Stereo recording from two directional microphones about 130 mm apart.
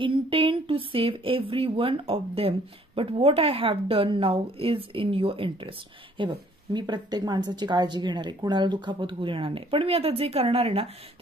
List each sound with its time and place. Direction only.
0.0 s a woman's voice: 45° right (ahead or behind)